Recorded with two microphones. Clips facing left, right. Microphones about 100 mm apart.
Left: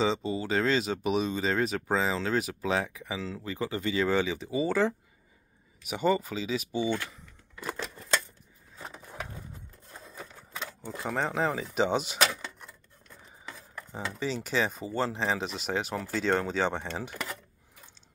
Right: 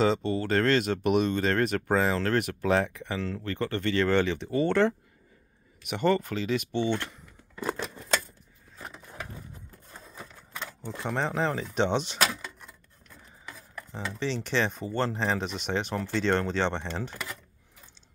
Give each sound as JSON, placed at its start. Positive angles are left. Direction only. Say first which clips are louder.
{"t": 0.0, "sound": "speech", "louder": "right 3 dB", "side_deg": 0}
{"t": 8.7, "sound": "a sound", "louder": "even", "side_deg": 20}
{"t": 9.8, "sound": "a sound", "louder": "left 1 dB", "side_deg": 0}
{"t": 10.2, "sound": "typewriter", "louder": "even", "side_deg": 15}
{"t": 11.0, "sound": "speech", "louder": "right 1 dB", "side_deg": 0}
{"t": 14.1, "sound": "speech", "louder": "right 1 dB", "side_deg": 5}